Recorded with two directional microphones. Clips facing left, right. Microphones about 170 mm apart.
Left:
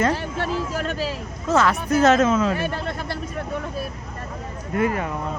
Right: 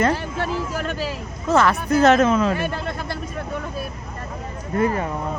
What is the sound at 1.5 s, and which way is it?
Speech, 60° right (ahead or behind).